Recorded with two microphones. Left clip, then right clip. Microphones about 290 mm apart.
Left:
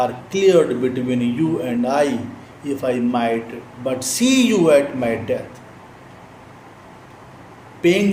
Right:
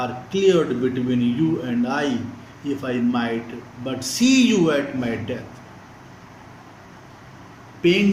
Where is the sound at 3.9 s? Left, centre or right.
Centre.